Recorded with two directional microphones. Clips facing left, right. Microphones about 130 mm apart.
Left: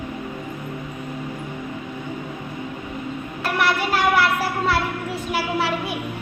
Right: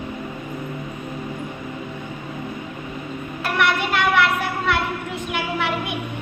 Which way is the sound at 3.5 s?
35° left (ahead or behind).